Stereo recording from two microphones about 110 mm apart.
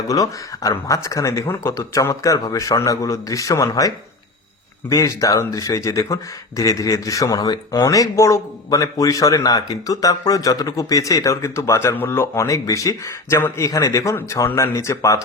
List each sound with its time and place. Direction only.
0.1 s speech: 35° left (ahead or behind)